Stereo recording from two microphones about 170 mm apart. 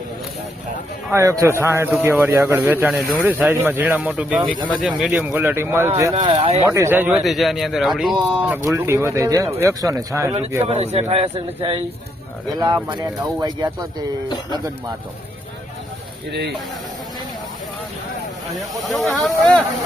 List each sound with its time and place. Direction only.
1.1 s a man's voice: 15° right (ahead or behind)
6.1 s a man's voice: 30° right (ahead or behind)
6.7 s a man's voice: 15° right (ahead or behind)
7.2 s speech: centre (ahead or behind)
8.4 s a man's voice: 10° right (ahead or behind)
10.7 s a man's voice: 35° right (ahead or behind)
16.3 s speech: 75° right (ahead or behind)
18.7 s speech: centre (ahead or behind)